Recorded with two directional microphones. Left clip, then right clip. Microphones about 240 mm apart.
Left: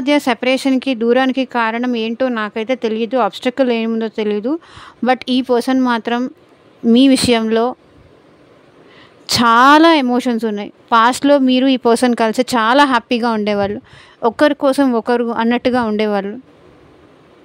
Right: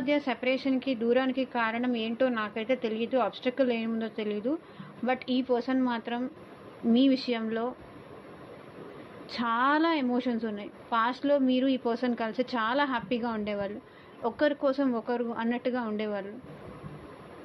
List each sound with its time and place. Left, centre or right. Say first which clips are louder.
0.0 s speech: left 13 dB; left
9.2 s speech: left 18 dB; left